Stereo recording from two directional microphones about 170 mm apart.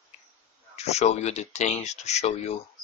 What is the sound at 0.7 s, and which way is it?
Speech, 40° left (ahead or behind).